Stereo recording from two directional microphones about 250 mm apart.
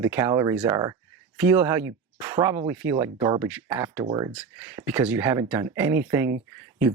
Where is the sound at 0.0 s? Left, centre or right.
Centre.